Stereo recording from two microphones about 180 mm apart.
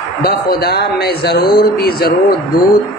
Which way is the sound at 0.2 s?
60° left (ahead or behind).